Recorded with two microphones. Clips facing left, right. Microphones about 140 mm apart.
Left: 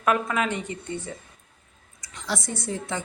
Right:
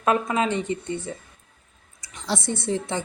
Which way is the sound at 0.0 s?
25° right (ahead or behind).